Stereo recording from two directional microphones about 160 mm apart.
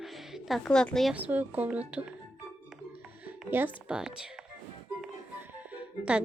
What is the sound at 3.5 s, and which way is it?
Speech, 10° right (ahead or behind).